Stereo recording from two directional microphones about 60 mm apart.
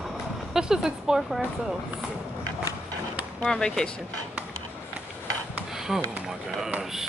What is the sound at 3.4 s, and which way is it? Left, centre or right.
Speech, centre.